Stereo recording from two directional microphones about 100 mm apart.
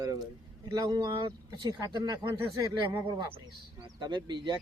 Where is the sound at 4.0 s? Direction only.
45° right (ahead or behind).